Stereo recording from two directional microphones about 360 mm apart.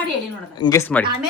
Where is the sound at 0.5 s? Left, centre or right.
Centre.